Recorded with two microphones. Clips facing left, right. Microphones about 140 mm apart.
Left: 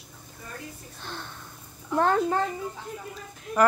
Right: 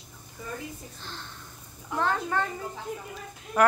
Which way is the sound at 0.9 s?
55° left (ahead or behind).